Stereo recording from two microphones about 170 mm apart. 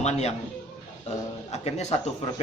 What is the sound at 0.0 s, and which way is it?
Speech, 40° left (ahead or behind).